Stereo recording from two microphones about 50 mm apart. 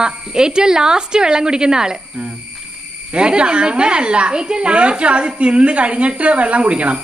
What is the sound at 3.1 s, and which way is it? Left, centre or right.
A woman's voice, right.